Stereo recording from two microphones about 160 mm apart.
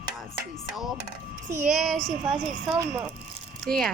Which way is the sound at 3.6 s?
Centre (ahead or behind).